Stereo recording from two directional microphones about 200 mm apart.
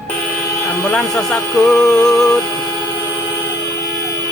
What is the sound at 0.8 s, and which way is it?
Speech, 5° left (ahead or behind).